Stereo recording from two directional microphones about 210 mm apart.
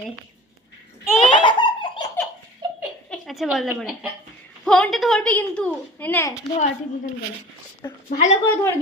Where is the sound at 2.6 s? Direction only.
20° right (ahead or behind).